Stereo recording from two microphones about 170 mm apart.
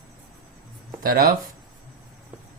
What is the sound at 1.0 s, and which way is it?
Speech, 60° right (ahead or behind).